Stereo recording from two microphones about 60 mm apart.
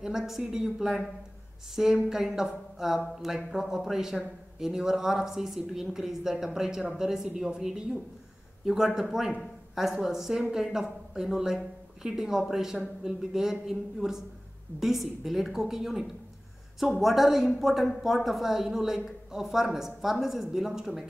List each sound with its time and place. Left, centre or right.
0.0 s speech: centre
2.0 s speech: centre